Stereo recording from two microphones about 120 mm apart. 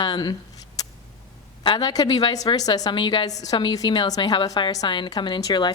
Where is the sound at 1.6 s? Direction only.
40° left (ahead or behind).